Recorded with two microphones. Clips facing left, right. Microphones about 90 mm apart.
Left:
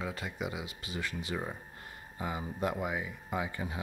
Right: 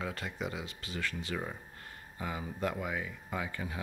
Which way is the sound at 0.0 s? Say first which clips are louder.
Even; 5° left (ahead or behind).